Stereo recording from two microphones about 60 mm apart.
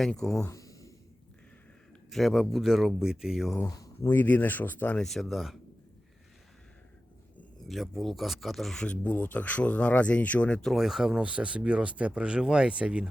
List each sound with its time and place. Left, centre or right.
0.1 s speech: centre
0.5 s a sound: left
2.0 s speech: centre
3.7 s speech: left
4.1 s speech: left
4.9 s speech: centre
7.7 s speech: centre
8.8 s speech: left
10.6 s speech: centre